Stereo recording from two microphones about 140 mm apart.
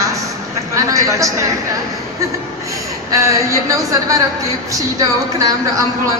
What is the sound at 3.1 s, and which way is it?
A woman's voice, 20° right (ahead or behind).